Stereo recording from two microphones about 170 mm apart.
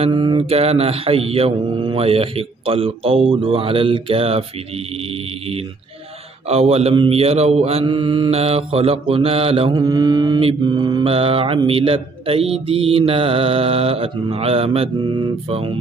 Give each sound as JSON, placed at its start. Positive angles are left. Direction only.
{"t": 0.0, "sound": "mantra", "side_deg": -25}
{"t": 6.5, "sound": "mantra", "side_deg": -35}